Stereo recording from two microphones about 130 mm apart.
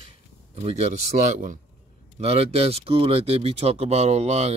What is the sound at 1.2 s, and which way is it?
Speech, 80° right.